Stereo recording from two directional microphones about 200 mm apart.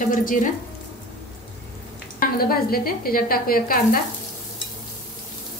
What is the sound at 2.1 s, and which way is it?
A woman's voice, 50° left (ahead or behind).